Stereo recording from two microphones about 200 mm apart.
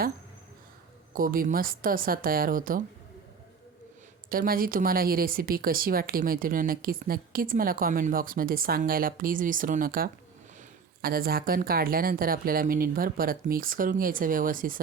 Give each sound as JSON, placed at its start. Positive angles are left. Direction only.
{"t": 1.1, "sound": "speech", "side_deg": -45}
{"t": 4.3, "sound": "speech", "side_deg": -45}